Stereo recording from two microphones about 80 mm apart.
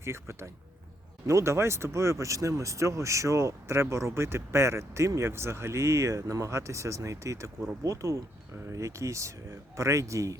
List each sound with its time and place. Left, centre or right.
0.0 s speech: right